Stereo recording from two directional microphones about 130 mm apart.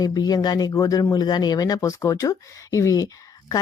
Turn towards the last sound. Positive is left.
turn(degrees=25)  # may be behind; listen again after turning